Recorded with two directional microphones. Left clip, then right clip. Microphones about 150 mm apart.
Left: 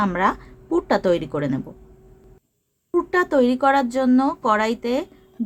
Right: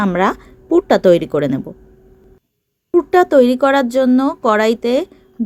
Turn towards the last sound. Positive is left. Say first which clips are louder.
# right 8 dB
turn(degrees=-30)  # may be behind; listen again after turning